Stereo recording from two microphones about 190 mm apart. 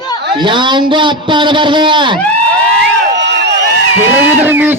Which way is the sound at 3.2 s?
65° right (ahead or behind).